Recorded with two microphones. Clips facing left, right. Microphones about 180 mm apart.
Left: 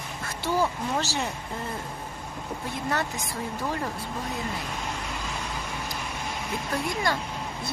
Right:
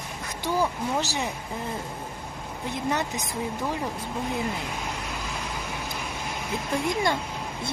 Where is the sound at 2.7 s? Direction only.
20° right (ahead or behind).